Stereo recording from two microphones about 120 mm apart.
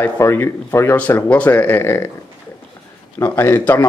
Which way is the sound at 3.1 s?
20° left (ahead or behind).